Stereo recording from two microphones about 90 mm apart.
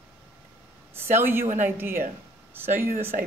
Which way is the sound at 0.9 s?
25° right (ahead or behind).